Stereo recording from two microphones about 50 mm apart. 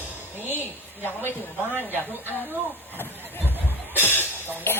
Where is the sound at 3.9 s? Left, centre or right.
Left.